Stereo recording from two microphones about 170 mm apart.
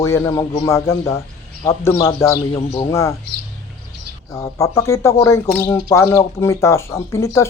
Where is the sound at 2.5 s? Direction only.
35° left (ahead or behind).